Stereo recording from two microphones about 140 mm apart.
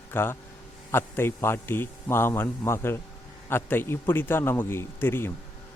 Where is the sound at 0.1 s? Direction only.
15° left (ahead or behind).